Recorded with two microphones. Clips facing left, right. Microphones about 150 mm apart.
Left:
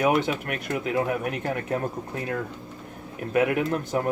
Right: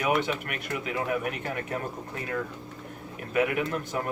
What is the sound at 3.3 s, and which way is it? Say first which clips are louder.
Speech: left 4 dB; 45° left (ahead or behind).